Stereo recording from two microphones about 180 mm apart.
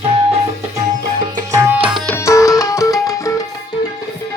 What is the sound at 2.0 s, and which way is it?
Music, 15° left (ahead or behind).